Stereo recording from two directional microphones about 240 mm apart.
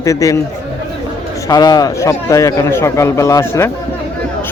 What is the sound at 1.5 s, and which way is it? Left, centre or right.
A man's voice, centre.